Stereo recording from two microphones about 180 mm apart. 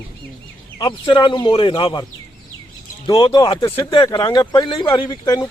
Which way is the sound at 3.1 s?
25° left (ahead or behind).